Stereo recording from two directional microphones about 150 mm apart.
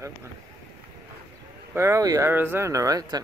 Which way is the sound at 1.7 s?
20° right (ahead or behind).